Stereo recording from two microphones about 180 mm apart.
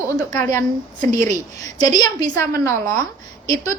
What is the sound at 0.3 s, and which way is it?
Speech, 15° left (ahead or behind).